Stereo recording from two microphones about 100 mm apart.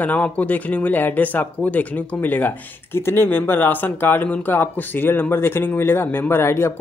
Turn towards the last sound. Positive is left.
turn(degrees=25)  # may be behind; listen again after turning